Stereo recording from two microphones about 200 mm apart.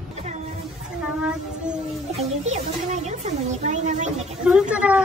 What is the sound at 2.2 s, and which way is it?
Speech, 35° right (ahead or behind).